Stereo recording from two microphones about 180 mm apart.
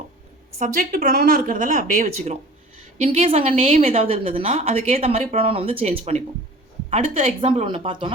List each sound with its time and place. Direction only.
0.6 s a woman's voice: 45° right (ahead or behind); by 8.1 s 25° right (ahead or behind)